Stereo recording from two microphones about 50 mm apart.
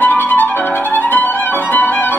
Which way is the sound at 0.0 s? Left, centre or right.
Left.